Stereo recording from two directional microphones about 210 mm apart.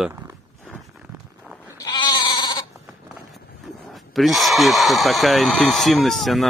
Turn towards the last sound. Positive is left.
turn(degrees=0)  # may be behind; listen again after turning